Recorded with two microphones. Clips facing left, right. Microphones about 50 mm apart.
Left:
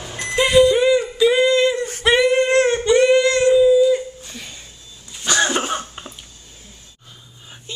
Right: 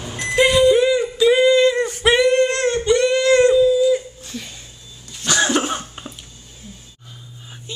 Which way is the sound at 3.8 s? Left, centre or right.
Centre.